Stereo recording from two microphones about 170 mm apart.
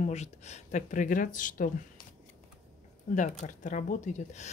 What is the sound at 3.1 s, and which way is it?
Speech, 45° left (ahead or behind).